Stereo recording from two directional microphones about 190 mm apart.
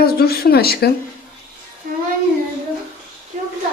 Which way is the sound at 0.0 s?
55° left (ahead or behind).